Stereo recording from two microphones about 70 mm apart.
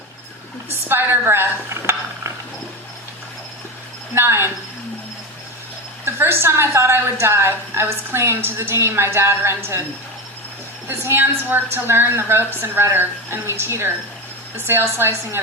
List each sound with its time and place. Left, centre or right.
0.7 s speech: right
4.1 s a woman's voice: right
6.1 s a woman's voice: right
10.8 s a woman's voice: right